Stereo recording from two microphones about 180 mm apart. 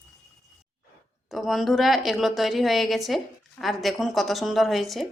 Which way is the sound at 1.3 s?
Centre (ahead or behind).